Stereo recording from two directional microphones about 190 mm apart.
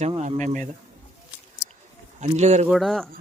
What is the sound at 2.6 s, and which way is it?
Speech, centre (ahead or behind).